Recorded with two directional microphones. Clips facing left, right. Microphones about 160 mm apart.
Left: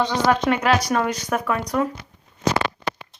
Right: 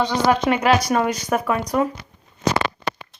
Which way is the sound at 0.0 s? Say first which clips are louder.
Right 1 dB; 10° right (ahead or behind).